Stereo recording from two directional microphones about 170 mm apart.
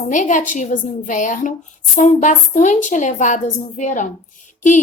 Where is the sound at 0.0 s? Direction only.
45° left (ahead or behind).